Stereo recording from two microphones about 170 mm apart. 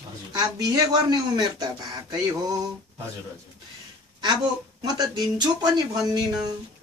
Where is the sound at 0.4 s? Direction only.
20° right (ahead or behind).